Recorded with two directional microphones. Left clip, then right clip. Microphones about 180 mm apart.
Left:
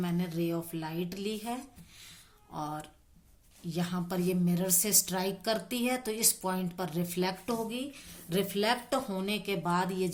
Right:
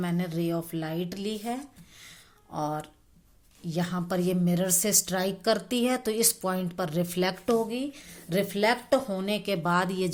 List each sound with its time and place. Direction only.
0.0 s a woman's voice: 40° right (ahead or behind)
2.0 s a sound: 35° right (ahead or behind)
3.7 s a woman's voice: 35° right (ahead or behind)